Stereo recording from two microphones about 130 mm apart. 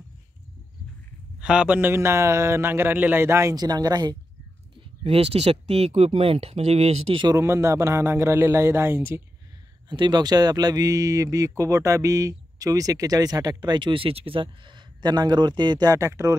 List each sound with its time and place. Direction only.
1.4 s speech: 10° right (ahead or behind); by 4.2 s 30° right (ahead or behind)
4.7 s speech: 50° right (ahead or behind)
7.2 s speech: 20° right (ahead or behind)
9.8 s speech: 35° right (ahead or behind)